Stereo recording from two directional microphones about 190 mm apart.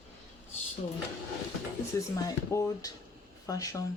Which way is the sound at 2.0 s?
15° left (ahead or behind).